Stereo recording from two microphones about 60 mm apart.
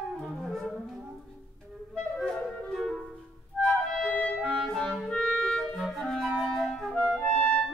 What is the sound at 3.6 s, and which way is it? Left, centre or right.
Music, centre.